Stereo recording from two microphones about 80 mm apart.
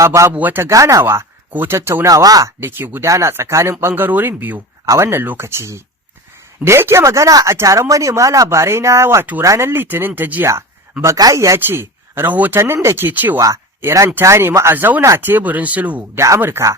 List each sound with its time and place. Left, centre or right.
0.0 s speech: right
0.3 s speech: right
0.7 s speech: right
2.0 s speech: right
2.6 s speech: right
11.3 s speech: right; by 16.0 s centre
16.1 s speech: right